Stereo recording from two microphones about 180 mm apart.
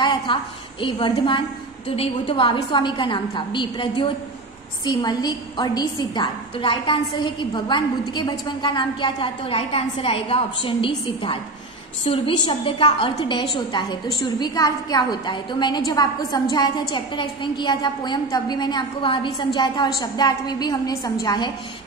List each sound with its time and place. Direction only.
0.0 s a woman's voice: 25° left (ahead or behind)
12.1 s a woman's voice: 30° left (ahead or behind)